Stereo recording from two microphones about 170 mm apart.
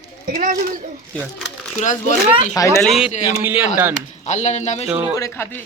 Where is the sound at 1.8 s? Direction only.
45° left (ahead or behind).